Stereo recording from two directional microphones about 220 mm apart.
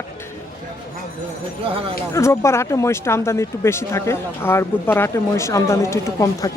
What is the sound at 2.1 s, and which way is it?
Speech, 10° left (ahead or behind).